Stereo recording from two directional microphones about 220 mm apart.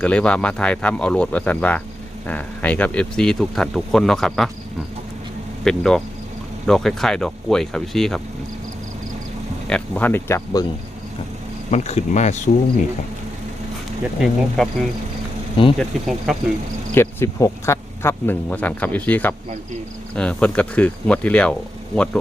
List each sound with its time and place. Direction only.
0.0 s speech: 5° left (ahead or behind)
5.6 s speech: 5° left (ahead or behind)
9.6 s speech: 5° left (ahead or behind)
11.7 s speech: 30° left (ahead or behind)
14.0 s speech: centre (ahead or behind)
16.9 s speech: 10° left (ahead or behind)